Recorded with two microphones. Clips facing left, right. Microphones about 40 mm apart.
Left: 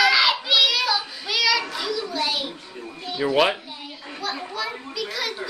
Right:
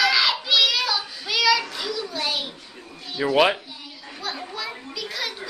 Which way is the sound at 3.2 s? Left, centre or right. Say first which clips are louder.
Right 1 dB; centre.